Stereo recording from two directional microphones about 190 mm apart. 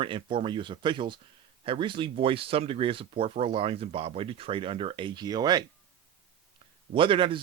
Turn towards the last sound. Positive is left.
turn(degrees=-25)  # may be behind; listen again after turning